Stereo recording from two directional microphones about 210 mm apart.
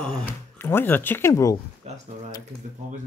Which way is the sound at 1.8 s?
30° right (ahead or behind).